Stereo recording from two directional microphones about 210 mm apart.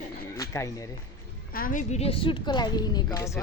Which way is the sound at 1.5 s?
40° left (ahead or behind).